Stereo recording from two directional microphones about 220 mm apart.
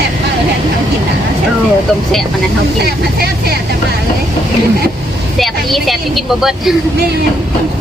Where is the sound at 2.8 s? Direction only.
45° right (ahead or behind).